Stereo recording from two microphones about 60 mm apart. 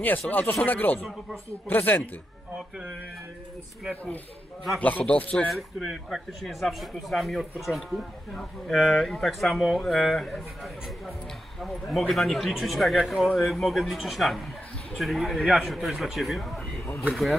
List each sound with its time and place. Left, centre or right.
0.3 s speech: left
3.9 s a man's voice: left
5.5 s speech: centre
8.3 s speech: centre
12.0 s speech: centre